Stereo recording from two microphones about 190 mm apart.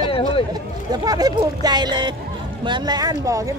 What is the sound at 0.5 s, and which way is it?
Speech, 20° right (ahead or behind).